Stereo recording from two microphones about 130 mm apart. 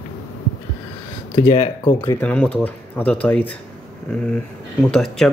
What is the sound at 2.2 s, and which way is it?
Speech, 10° left (ahead or behind).